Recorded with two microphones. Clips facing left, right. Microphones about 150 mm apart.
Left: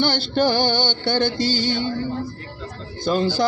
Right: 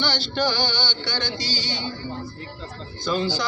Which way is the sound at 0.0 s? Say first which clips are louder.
Left 5 dB; 50° left (ahead or behind).